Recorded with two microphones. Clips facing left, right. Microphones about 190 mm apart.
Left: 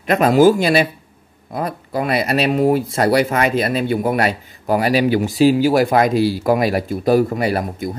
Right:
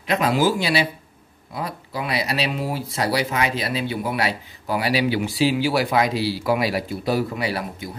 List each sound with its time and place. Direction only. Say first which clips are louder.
0.0 s speech: left 8 dB; 50° left (ahead or behind)